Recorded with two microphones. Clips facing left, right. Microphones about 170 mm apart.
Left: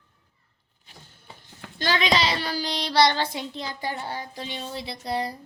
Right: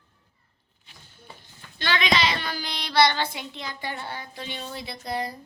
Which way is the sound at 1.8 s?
40° left (ahead or behind).